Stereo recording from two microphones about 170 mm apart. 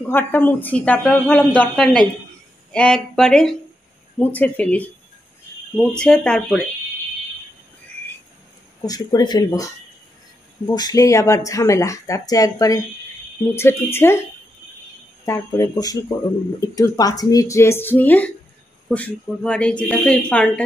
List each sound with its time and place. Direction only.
0.1 s speech: 10° left (ahead or behind)
8.8 s speech: 20° left (ahead or behind)
10.7 s speech: 20° left (ahead or behind)
13.9 s speech: 15° left (ahead or behind)
15.2 s speech: 20° left (ahead or behind)